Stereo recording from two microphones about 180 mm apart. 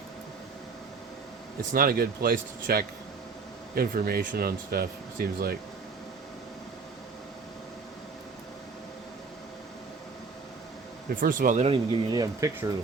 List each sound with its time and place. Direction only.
1.7 s speech: 55° right (ahead or behind)
11.1 s speech: 50° right (ahead or behind); by 12.7 s 20° right (ahead or behind)